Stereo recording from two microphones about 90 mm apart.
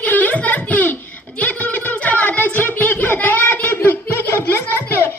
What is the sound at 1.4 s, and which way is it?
Music, 20° left (ahead or behind).